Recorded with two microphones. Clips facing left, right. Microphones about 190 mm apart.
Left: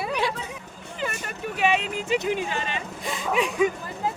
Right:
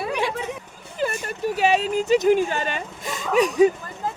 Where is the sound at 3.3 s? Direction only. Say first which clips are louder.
Right 7 dB; 40° right (ahead or behind).